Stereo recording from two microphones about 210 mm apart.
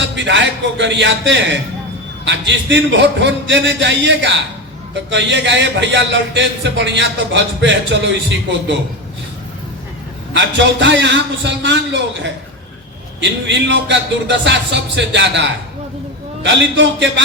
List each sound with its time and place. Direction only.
0.0 s a man's voice: 60° right (ahead or behind)
10.3 s a man's voice: 60° right (ahead or behind)
13.5 s a man's voice: 55° right (ahead or behind)